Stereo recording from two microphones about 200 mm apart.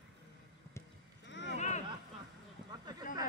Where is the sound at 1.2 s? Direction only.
65° left (ahead or behind).